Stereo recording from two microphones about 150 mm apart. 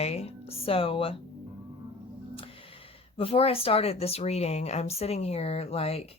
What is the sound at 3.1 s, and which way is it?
Speech, 40° left (ahead or behind).